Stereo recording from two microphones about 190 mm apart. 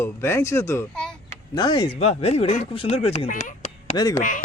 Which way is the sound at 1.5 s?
25° left (ahead or behind).